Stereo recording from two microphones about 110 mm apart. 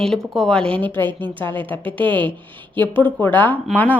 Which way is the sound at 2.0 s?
45° right (ahead or behind).